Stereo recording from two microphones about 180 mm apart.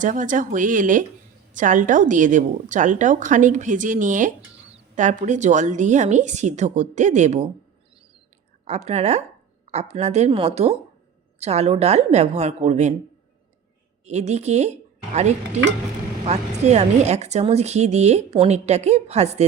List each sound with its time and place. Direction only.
0.0 s a woman's voice: 45° right (ahead or behind)
8.6 s speech: 40° right (ahead or behind)
14.0 s speech: 40° right (ahead or behind)